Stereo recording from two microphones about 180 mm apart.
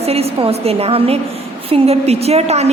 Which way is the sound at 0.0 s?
35° right (ahead or behind).